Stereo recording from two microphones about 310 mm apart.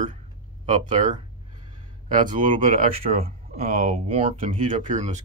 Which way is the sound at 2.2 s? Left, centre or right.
Centre.